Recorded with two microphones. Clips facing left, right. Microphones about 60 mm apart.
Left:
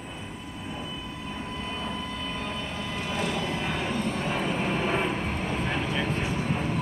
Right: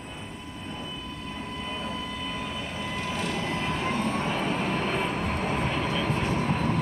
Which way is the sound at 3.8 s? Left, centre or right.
Right.